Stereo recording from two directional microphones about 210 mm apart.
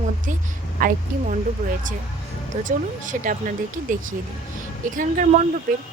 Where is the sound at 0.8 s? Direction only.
40° right (ahead or behind).